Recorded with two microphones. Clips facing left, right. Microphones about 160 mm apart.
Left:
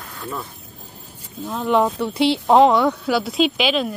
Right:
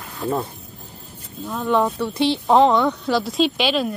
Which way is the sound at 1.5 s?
10° left (ahead or behind).